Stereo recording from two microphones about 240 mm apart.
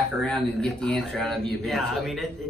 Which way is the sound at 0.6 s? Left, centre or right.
Centre.